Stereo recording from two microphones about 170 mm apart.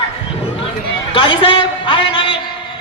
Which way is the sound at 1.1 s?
30° left (ahead or behind).